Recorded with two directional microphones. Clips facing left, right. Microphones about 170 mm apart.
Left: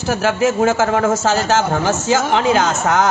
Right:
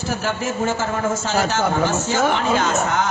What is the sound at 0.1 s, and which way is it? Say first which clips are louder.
Speech: left 9 dB; 90° left.